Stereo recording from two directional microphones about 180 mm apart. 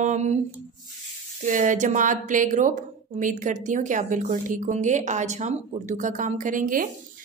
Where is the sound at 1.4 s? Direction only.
45° right (ahead or behind).